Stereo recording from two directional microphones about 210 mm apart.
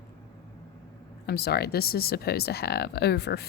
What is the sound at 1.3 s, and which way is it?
Speech, 50° left (ahead or behind).